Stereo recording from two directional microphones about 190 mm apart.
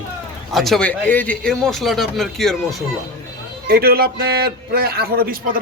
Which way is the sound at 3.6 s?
55° right (ahead or behind).